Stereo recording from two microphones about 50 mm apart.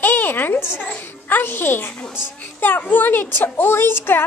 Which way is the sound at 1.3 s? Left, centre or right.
Left.